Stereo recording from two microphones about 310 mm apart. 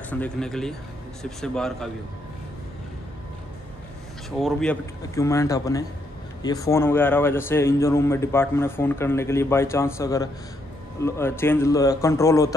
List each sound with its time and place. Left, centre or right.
0.1 s speech: centre
4.4 s speech: centre